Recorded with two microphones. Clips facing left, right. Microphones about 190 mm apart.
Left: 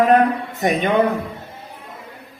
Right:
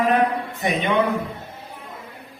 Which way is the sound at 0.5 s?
40° left (ahead or behind).